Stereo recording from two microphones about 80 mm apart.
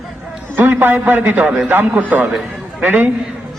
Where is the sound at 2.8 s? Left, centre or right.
Right.